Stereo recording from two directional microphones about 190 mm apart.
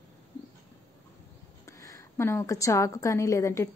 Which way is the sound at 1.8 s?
15° left (ahead or behind).